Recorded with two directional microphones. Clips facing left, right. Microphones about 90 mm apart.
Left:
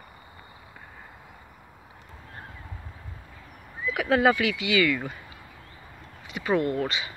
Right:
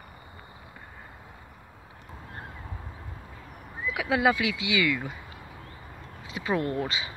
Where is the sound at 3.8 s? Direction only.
15° right (ahead or behind).